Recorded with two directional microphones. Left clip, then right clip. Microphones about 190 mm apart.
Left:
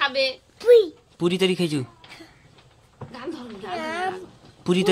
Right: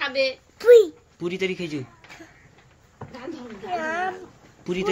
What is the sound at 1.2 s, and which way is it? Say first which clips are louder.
Speech: left 5 dB; 45° left (ahead or behind).